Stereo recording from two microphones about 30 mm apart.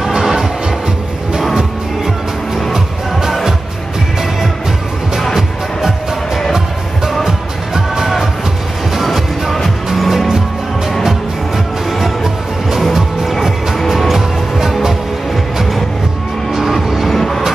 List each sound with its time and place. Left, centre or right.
0.0 s music: centre
2.7 s music: centre
5.3 s music: centre
8.0 s music: centre
13.8 s music: centre
16.8 s vehicle: centre
17.1 s music: centre